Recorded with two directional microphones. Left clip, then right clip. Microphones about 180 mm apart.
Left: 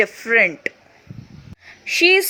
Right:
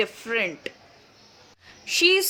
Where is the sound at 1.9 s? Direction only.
20° left (ahead or behind).